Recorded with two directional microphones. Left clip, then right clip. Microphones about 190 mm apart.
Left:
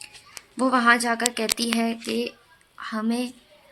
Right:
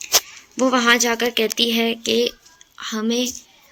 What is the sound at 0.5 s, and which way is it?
A woman's voice, centre (ahead or behind).